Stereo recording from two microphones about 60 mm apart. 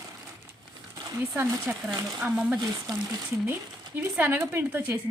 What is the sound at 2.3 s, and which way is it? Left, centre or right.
Speech, centre.